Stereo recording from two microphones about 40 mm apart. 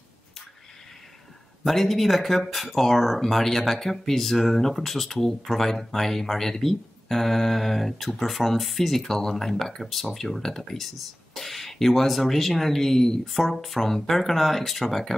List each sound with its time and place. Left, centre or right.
1.6 s speech: centre